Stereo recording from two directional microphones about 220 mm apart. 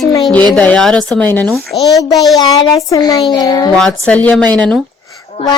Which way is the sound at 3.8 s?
5° left (ahead or behind).